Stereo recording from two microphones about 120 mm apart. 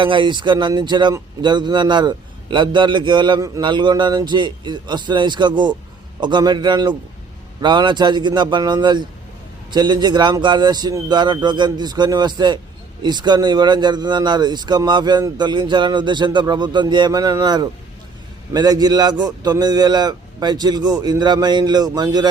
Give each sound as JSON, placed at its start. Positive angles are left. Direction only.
{"t": 0.0, "sound": "a man's voice", "side_deg": -40}